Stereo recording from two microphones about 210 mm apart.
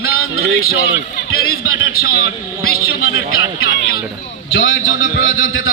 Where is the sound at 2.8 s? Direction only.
90° left.